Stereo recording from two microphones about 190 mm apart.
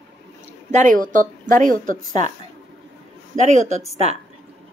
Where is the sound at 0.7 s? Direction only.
40° right (ahead or behind).